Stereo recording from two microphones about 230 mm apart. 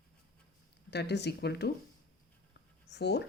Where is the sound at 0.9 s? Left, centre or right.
Left.